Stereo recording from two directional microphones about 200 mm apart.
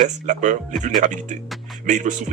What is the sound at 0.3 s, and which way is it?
Speech, 40° right (ahead or behind).